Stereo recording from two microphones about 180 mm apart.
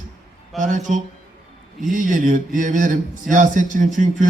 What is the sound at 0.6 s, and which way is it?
Speech, 45° right (ahead or behind).